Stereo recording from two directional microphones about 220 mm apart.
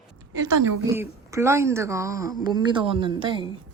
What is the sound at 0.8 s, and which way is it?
Speech, 10° right (ahead or behind).